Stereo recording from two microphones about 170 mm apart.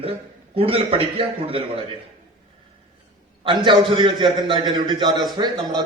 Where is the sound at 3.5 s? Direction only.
25° right (ahead or behind).